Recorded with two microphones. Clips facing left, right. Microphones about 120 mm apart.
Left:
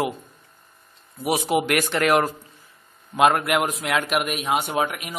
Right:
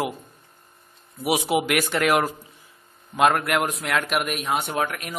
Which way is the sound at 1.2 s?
10° right (ahead or behind).